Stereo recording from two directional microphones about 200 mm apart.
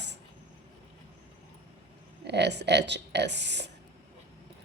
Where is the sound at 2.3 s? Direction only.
60° right (ahead or behind).